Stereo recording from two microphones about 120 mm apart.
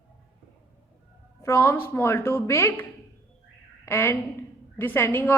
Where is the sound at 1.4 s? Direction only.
25° left (ahead or behind).